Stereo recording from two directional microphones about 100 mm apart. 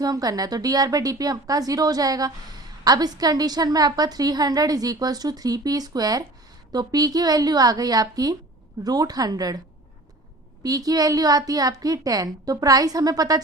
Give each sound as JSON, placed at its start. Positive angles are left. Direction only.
{"t": 0.0, "sound": "a woman's voice", "side_deg": -40}
{"t": 10.6, "sound": "a woman's voice", "side_deg": -40}